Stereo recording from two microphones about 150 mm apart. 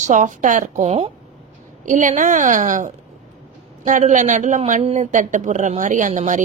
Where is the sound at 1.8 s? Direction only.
60° right (ahead or behind).